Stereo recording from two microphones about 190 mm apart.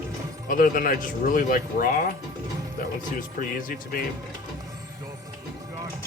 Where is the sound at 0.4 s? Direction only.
45° left (ahead or behind).